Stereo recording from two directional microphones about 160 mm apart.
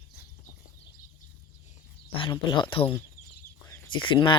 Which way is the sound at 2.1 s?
30° left (ahead or behind).